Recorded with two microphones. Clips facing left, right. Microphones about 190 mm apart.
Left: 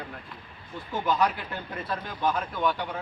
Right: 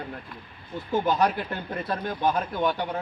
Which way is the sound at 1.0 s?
40° right (ahead or behind).